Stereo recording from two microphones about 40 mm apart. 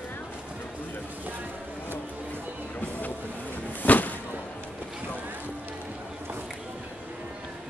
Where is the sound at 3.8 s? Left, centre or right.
Left.